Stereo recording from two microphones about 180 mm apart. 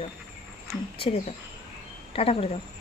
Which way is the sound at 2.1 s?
30° left (ahead or behind).